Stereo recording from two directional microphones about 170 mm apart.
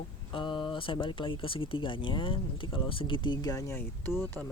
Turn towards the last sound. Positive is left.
turn(degrees=15)  # may be behind; listen again after turning